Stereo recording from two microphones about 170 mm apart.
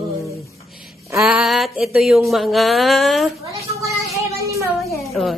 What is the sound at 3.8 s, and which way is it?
Child singing, centre (ahead or behind).